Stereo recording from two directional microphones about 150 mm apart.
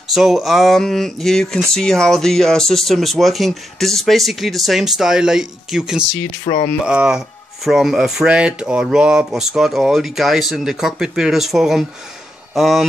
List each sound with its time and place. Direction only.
0.1 s speech: centre (ahead or behind)
6.5 s speech: 45° left (ahead or behind)
6.9 s speech: 5° right (ahead or behind)